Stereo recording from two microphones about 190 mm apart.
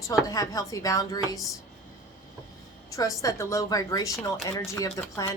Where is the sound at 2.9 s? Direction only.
15° left (ahead or behind).